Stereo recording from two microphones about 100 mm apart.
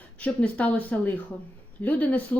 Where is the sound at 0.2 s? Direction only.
15° left (ahead or behind).